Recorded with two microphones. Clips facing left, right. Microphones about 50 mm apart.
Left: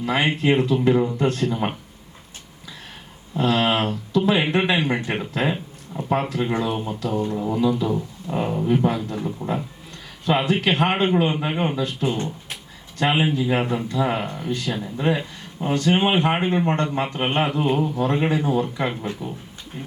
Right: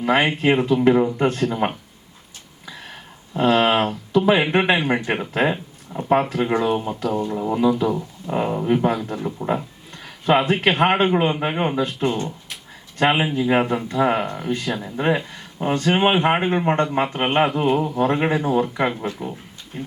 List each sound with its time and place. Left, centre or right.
0.0 s a man's voice: right
3.3 s a man's voice: right
14.2 s speech: centre
14.5 s a man's voice: right
17.7 s speech: centre
17.9 s a man's voice: right
18.9 s speech: centre
19.7 s speech: right